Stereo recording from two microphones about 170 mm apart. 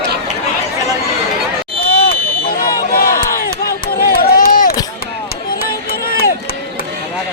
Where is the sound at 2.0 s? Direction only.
60° left (ahead or behind).